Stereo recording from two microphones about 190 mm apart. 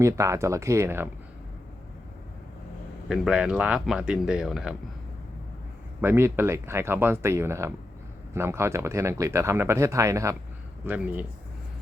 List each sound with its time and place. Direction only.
0.0 s speech: 15° right (ahead or behind)
3.1 s speech: 5° right (ahead or behind)
6.0 s speech: 15° right (ahead or behind)